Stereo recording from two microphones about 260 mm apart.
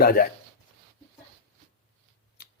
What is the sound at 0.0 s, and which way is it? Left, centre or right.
Speech, left.